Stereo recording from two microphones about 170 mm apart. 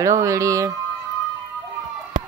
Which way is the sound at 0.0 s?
20° right (ahead or behind).